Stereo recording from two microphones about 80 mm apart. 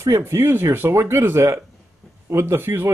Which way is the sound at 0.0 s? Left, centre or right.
Right.